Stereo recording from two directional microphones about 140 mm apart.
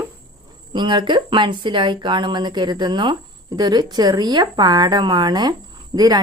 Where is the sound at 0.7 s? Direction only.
35° right (ahead or behind).